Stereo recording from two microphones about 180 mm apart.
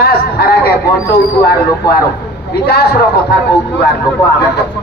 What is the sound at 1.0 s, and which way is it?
A man's voice, 60° left (ahead or behind).